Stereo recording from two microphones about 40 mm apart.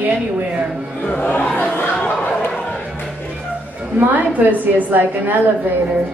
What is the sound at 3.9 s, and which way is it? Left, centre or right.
A woman's voice, right.